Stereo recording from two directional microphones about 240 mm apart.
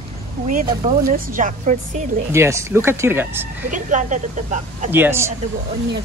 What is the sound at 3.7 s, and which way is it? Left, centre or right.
Speech, right.